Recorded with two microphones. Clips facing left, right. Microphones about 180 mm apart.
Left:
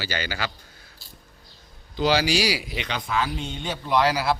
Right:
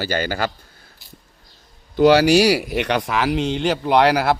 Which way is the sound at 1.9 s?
60° right (ahead or behind).